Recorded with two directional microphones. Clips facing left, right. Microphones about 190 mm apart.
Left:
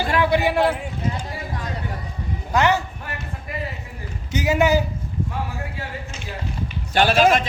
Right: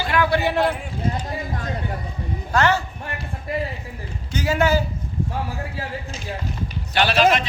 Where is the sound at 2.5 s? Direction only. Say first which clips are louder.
Left 1 dB; 15° left (ahead or behind).